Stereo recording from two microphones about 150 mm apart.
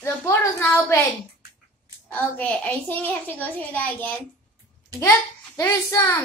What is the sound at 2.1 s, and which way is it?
A child's voice, 10° left (ahead or behind).